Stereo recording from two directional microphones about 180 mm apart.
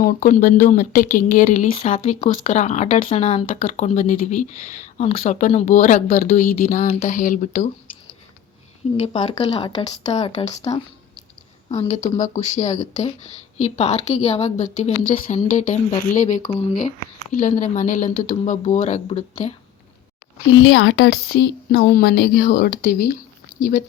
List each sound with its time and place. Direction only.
0.0 s speech: 50° left (ahead or behind)
9.0 s speech: 35° left (ahead or behind)
10.1 s speech: 35° left (ahead or behind)
11.9 s speech: 40° left (ahead or behind)
20.6 s a woman's voice: 90° left